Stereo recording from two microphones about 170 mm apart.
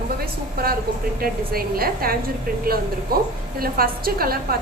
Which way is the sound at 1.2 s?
60° right (ahead or behind).